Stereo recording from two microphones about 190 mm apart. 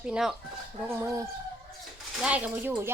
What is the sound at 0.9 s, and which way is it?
Speech, 15° right (ahead or behind).